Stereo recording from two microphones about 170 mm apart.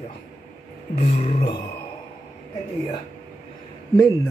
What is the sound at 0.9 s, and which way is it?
Music, 45° left (ahead or behind).